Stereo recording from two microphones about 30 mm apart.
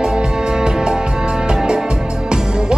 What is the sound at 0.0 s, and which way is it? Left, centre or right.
Music, right.